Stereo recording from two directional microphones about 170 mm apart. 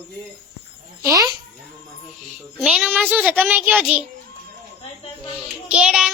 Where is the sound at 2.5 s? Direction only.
5° right (ahead or behind).